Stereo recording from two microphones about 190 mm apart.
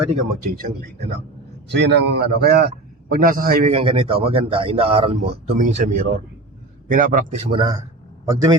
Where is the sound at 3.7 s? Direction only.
30° right (ahead or behind).